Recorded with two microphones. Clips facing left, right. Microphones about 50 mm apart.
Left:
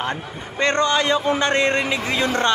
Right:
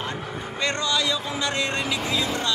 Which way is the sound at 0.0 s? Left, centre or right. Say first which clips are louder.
Left 4 dB; left.